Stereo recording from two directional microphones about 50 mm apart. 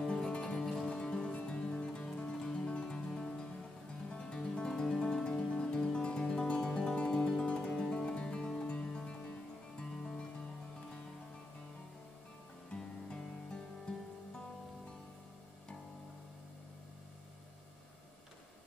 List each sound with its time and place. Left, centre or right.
0.0 s music: centre
12.7 s music: centre